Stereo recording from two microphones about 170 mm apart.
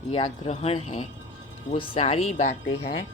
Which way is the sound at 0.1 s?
35° left (ahead or behind).